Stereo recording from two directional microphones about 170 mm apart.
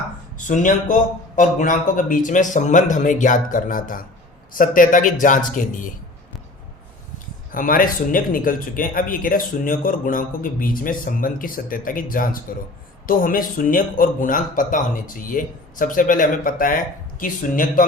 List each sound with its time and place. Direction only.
0.3 s speech: 50° left (ahead or behind)
7.5 s speech: 55° left (ahead or behind)